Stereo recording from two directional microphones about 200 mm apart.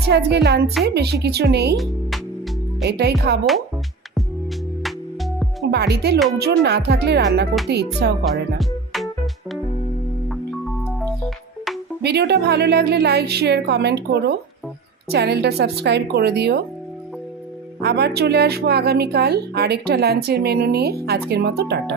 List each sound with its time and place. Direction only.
0.1 s a woman's voice: 55° right (ahead or behind)
1.7 s speech: centre (ahead or behind)
2.8 s a woman's voice: 55° right (ahead or behind)
5.7 s a woman's voice: 55° right (ahead or behind)
8.5 s music: centre (ahead or behind)
12.0 s a woman's voice: 55° right (ahead or behind)
17.7 s speech: 55° right (ahead or behind)